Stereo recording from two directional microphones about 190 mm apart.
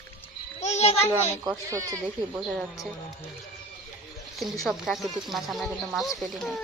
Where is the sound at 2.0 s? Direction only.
5° right (ahead or behind).